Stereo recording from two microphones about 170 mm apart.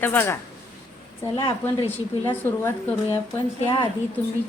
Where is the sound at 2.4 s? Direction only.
10° left (ahead or behind).